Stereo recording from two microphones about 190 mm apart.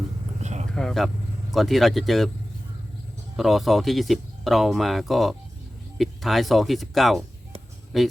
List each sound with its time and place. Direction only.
0.4 s vehicle: 35° right (ahead or behind)
0.7 s speech: 5° left (ahead or behind)
3.3 s speech: centre (ahead or behind)